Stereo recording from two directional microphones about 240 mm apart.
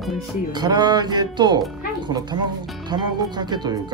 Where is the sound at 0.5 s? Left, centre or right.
Centre.